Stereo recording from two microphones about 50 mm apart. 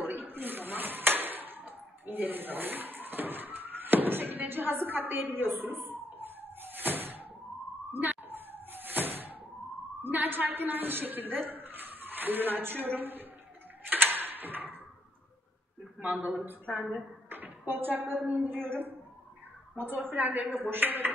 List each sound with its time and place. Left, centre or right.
0.0 s a sound: right
10.0 s a woman's voice: right
13.8 s tick-tock: right
16.0 s speech: right
16.7 s a woman's voice: centre
17.3 s a sound: right
18.4 s a woman's voice: right